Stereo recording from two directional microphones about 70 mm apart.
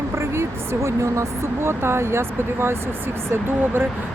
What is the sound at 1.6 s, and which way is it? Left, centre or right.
Speech, right.